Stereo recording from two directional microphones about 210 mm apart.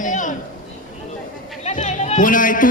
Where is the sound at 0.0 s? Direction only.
40° left (ahead or behind).